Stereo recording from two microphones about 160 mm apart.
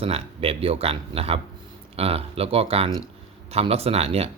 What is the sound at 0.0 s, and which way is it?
Speech, 35° right (ahead or behind).